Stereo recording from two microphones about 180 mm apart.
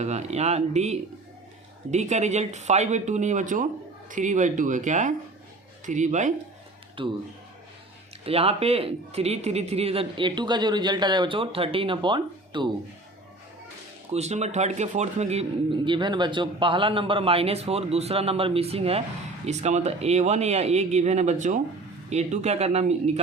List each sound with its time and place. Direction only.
0.0 s speech: 40° right (ahead or behind)
7.0 s speech: 30° right (ahead or behind)
8.2 s speech: 35° right (ahead or behind)
14.1 s speech: 40° right (ahead or behind)